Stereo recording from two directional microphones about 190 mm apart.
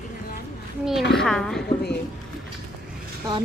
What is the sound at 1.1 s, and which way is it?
Speech, centre (ahead or behind).